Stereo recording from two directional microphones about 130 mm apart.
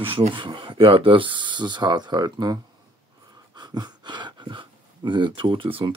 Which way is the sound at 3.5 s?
35° right (ahead or behind).